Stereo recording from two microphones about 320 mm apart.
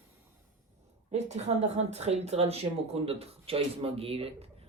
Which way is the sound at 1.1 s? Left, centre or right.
Right.